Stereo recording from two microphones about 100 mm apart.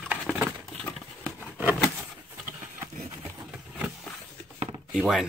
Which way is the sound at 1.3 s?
20° right (ahead or behind).